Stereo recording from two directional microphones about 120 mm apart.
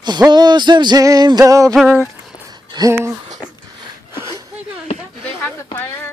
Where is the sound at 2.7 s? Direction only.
30° right (ahead or behind).